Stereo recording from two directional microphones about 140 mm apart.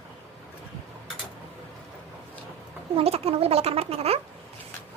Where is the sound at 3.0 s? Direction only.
45° right (ahead or behind).